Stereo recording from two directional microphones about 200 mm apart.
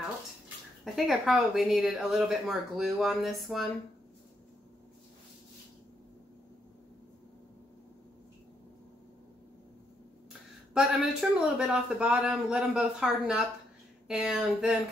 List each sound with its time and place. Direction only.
0.8 s speech: centre (ahead or behind)
10.7 s speech: 5° right (ahead or behind)